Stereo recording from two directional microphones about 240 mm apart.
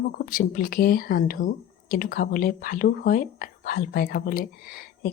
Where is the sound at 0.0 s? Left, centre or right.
Left.